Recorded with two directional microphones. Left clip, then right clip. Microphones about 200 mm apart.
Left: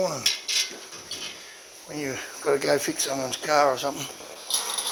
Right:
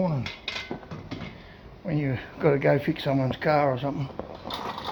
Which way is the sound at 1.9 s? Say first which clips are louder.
Left 1 dB; 5° left (ahead or behind).